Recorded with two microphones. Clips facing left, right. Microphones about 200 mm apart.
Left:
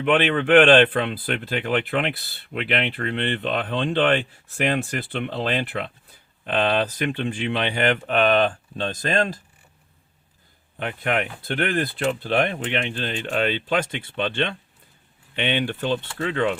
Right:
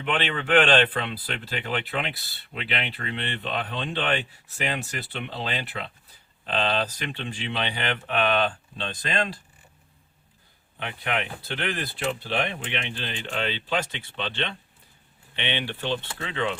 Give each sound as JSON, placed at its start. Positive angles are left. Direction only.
{"t": 0.0, "sound": "speech", "side_deg": 50}
{"t": 10.8, "sound": "speech", "side_deg": 50}